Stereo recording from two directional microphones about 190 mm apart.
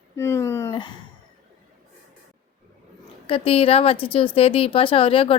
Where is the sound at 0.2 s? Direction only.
15° left (ahead or behind).